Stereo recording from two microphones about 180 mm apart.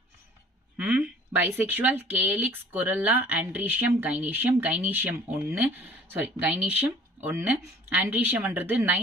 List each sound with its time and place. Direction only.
0.8 s speech: 5° right (ahead or behind)